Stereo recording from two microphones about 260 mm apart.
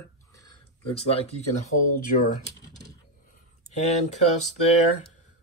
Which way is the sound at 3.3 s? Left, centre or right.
Left.